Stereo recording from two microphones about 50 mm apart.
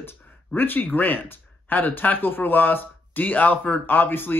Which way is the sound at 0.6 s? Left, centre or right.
Left.